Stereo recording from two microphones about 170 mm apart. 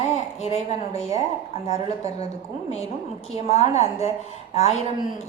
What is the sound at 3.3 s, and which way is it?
A woman's voice, 40° left (ahead or behind).